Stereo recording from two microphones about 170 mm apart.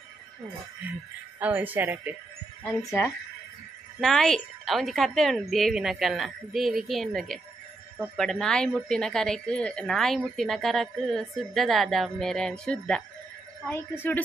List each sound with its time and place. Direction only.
1.4 s speech: 10° right (ahead or behind)
4.0 s a woman's voice: centre (ahead or behind)